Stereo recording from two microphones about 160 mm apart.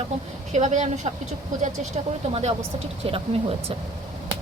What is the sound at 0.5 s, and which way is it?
Speech, 50° right (ahead or behind).